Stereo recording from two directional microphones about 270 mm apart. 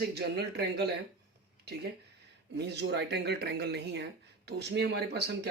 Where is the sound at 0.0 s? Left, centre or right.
Right.